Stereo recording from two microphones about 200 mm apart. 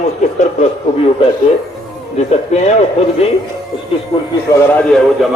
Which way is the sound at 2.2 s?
30° left (ahead or behind).